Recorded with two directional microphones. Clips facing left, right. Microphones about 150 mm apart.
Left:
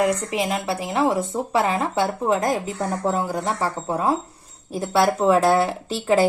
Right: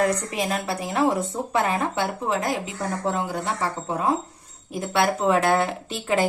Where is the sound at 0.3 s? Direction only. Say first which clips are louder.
Left 2 dB; 25° left (ahead or behind).